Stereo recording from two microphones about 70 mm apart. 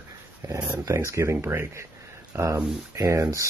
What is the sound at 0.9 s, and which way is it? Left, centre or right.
Speech, right.